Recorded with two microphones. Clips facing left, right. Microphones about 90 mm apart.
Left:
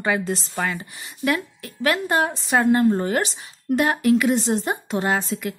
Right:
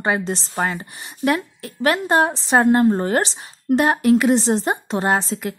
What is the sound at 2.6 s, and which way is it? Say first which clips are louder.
A woman's voice: right 2 dB; 40° right (ahead or behind).